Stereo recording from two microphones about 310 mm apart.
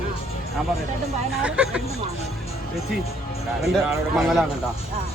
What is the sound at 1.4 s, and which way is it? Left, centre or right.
Speech, centre.